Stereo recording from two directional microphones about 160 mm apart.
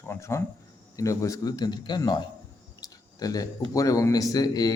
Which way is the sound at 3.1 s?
25° left (ahead or behind).